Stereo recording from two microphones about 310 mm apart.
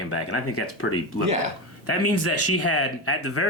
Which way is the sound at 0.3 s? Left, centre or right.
Left.